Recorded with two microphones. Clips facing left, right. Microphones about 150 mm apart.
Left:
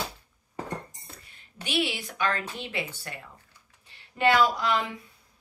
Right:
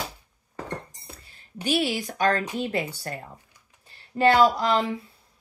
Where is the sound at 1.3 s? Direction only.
40° right (ahead or behind).